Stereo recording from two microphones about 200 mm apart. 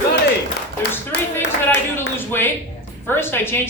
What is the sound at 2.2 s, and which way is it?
A man's voice, 10° left (ahead or behind).